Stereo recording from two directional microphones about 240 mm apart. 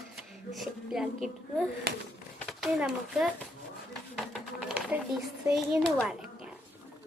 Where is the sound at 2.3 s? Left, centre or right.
Centre.